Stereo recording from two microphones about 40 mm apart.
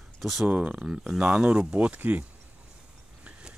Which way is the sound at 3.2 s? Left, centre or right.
Right.